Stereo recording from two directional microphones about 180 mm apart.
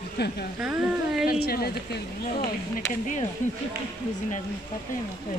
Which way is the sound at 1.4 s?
60° left (ahead or behind).